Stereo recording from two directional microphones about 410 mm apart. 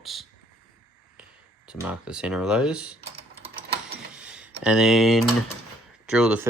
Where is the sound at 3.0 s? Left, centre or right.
Centre.